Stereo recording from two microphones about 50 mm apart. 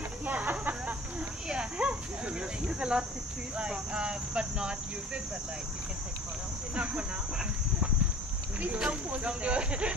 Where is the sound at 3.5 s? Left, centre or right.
Centre.